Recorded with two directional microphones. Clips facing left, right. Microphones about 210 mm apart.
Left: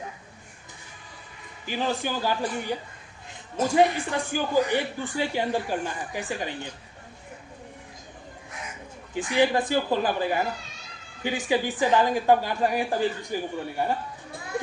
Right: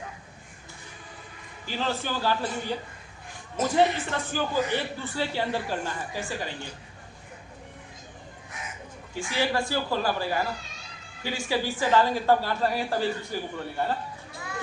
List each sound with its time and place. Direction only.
1.6 s a man's voice: 15° left (ahead or behind)
9.1 s a man's voice: 20° left (ahead or behind)